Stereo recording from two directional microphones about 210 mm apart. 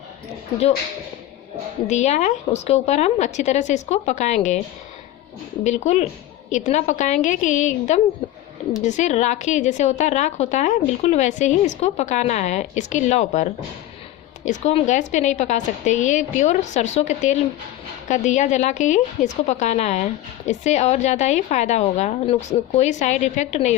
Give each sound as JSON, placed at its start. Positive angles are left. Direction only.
{"t": 1.9, "sound": "a woman's voice", "side_deg": 35}
{"t": 5.6, "sound": "a woman's voice", "side_deg": 30}